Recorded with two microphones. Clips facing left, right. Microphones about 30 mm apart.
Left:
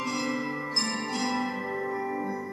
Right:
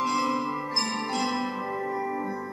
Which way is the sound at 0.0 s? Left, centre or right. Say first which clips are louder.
Right 4 dB; centre.